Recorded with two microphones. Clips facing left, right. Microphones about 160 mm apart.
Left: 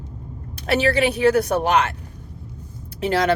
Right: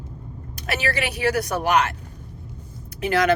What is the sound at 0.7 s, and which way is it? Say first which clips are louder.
Speech: left 7 dB; 30° left (ahead or behind).